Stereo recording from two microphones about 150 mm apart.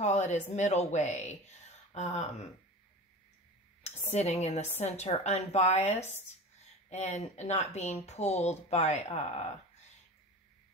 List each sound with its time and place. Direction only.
0.0 s a woman's voice: 50° left (ahead or behind)
4.1 s a woman's voice: 45° left (ahead or behind)